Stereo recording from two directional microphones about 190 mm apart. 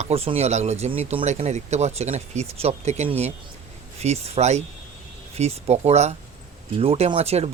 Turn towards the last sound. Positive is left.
turn(degrees=-35)  # may be behind; listen again after turning